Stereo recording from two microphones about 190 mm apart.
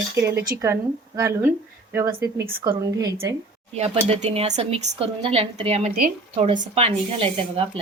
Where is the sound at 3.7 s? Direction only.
35° right (ahead or behind).